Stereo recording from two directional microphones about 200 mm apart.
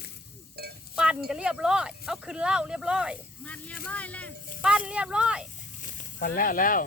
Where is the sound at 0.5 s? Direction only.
50° right (ahead or behind).